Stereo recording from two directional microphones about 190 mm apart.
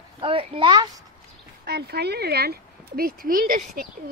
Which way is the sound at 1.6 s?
55° right (ahead or behind).